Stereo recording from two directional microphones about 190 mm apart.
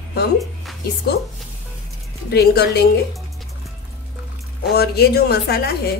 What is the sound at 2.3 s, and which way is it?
Speech, 55° left (ahead or behind).